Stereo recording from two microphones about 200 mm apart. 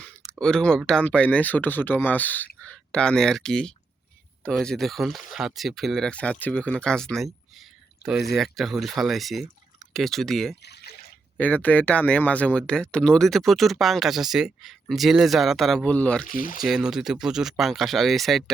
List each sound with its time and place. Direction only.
0.0 s speech: 5° left (ahead or behind)
10.6 s trickle: 55° left (ahead or behind)
11.3 s speech: 5° left (ahead or behind)
16.2 s speech: 40° left (ahead or behind)
16.6 s speech: centre (ahead or behind)